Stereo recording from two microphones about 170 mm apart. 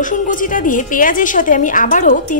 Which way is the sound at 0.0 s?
50° left (ahead or behind).